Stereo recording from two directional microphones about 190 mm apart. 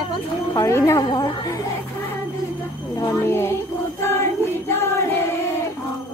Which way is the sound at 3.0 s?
15° left (ahead or behind).